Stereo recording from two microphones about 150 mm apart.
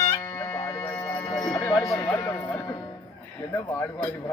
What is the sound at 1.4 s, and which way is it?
Tick-tock, 5° left (ahead or behind).